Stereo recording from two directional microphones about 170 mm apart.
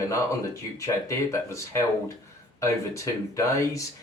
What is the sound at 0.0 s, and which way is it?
A man's voice, 20° left (ahead or behind).